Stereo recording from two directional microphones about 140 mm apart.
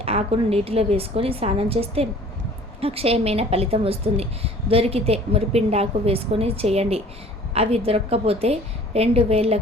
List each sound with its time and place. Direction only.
0.0 s a woman's voice: 45° right (ahead or behind)